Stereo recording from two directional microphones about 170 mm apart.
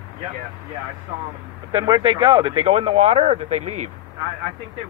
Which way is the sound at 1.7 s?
25° right (ahead or behind).